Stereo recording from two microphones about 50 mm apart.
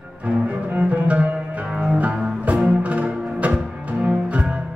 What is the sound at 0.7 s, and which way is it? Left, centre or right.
Cello, right.